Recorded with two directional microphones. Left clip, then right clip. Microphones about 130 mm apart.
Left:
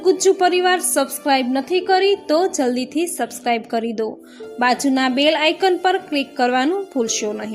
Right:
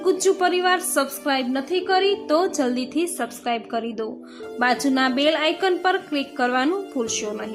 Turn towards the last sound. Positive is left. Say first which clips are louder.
# left 4 dB
turn(degrees=25)  # may be behind; listen again after turning